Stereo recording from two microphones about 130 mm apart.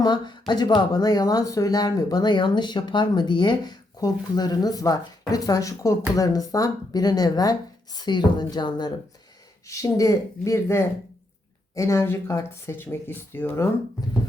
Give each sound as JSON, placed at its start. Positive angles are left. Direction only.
{"t": 0.0, "sound": "speech", "side_deg": 35}